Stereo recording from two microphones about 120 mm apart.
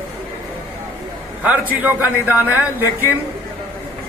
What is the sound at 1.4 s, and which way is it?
Speech, 15° right (ahead or behind).